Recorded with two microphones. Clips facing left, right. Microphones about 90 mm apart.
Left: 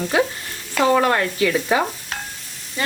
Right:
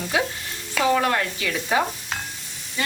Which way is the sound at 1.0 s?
45° left (ahead or behind).